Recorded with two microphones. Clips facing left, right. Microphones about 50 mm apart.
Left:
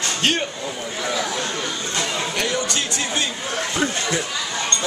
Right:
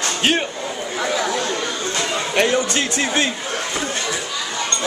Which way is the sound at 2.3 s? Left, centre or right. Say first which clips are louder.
Right 9 dB; right.